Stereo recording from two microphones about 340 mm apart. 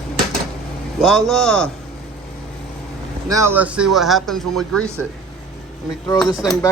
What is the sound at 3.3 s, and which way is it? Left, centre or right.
Speech, centre.